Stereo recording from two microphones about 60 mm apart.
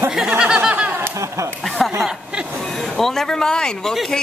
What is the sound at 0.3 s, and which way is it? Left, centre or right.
Snicker, centre.